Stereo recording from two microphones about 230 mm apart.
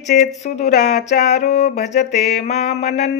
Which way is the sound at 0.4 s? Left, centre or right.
Left.